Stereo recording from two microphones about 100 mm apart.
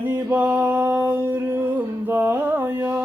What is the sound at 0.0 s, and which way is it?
Music, 20° right (ahead or behind).